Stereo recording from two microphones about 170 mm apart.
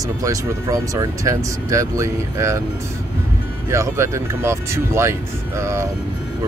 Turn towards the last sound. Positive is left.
turn(degrees=-15)  # may be behind; listen again after turning